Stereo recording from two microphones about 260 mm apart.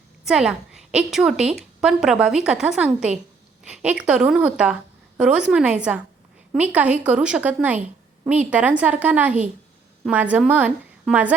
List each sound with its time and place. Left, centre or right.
0.3 s a woman's voice: centre